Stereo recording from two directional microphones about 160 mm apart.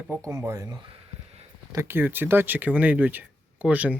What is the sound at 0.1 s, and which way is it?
Speech, 15° right (ahead or behind).